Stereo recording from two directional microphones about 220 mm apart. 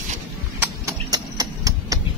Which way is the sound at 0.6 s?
15° right (ahead or behind).